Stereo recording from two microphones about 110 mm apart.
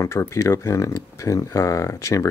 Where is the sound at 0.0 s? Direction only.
25° left (ahead or behind).